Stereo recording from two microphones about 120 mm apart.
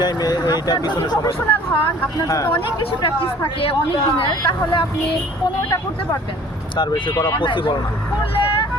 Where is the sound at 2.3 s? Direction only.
25° left (ahead or behind).